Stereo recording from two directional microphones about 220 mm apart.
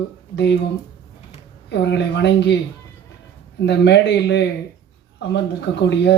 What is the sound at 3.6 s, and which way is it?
Speech, 50° left (ahead or behind).